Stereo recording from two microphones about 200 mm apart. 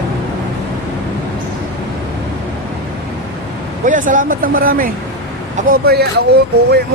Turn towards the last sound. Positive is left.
turn(degrees=-55)  # may be behind; listen again after turning